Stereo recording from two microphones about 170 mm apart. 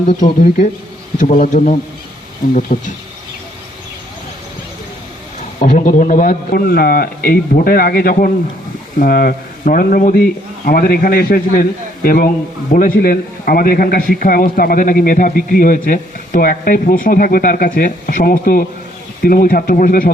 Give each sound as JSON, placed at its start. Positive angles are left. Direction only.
{"t": 1.2, "sound": "a man's voice", "side_deg": 50}
{"t": 5.5, "sound": "a man's voice", "side_deg": 45}